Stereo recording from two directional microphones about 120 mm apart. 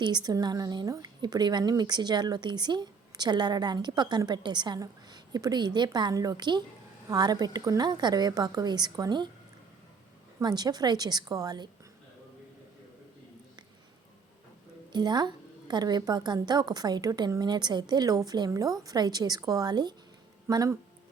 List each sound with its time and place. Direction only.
0.0 s a woman's voice: 35° right (ahead or behind)
10.4 s a woman's voice: 35° right (ahead or behind)
14.9 s a woman's voice: 35° right (ahead or behind)